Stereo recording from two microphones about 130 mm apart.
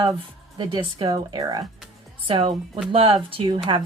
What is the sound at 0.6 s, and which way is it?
A woman's voice, 40° right (ahead or behind).